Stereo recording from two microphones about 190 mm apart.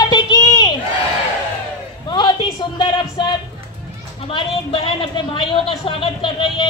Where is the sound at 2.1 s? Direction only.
25° left (ahead or behind).